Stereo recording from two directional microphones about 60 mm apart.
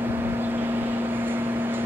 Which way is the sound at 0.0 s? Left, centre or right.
Right.